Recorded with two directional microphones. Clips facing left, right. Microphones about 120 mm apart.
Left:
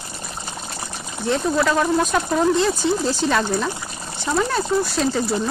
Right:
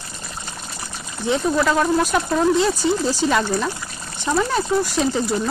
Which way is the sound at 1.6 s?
Centre (ahead or behind).